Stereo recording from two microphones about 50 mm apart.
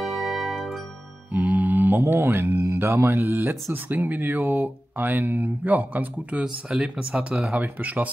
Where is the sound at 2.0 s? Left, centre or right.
Right.